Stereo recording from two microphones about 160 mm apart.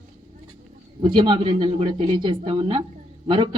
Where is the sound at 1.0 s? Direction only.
30° right (ahead or behind).